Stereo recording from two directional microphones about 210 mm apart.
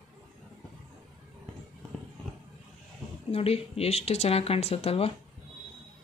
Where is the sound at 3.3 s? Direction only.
30° left (ahead or behind).